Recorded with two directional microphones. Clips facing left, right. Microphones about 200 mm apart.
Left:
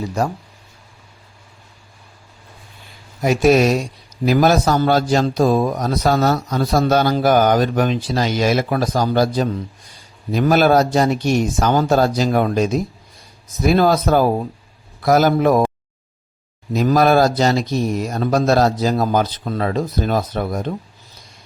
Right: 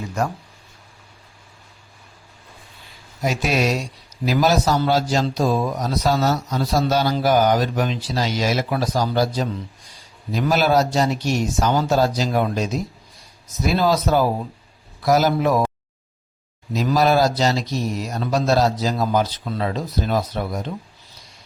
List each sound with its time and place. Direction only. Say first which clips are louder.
0.2 s speech: left 2 dB; 35° left (ahead or behind)
3.2 s a man's voice: left 7 dB; 50° left (ahead or behind)
16.7 s a man's voice: left 4 dB; 50° left (ahead or behind)